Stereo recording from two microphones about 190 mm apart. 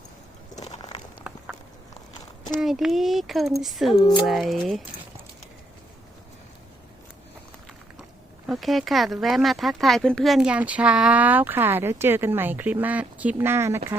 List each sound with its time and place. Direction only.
0.5 s biting: 35° left (ahead or behind)
0.8 s a sound: 20° left (ahead or behind)
1.2 s walk: 5° right (ahead or behind)
2.6 s speech: centre (ahead or behind)
8.4 s speech: centre (ahead or behind)